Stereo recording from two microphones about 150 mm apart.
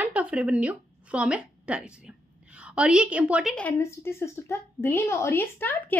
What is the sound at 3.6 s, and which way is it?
A woman's voice, 15° left (ahead or behind).